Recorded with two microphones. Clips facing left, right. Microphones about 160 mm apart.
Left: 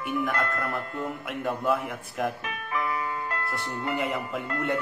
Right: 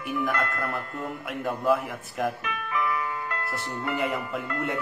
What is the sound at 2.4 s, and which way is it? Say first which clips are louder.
Music: right 2 dB; 35° left (ahead or behind).